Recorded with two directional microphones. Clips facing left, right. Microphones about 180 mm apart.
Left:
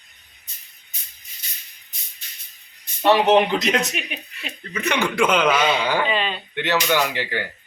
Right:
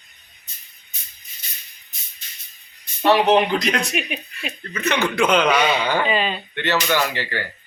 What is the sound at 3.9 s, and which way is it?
Speech, 10° right (ahead or behind).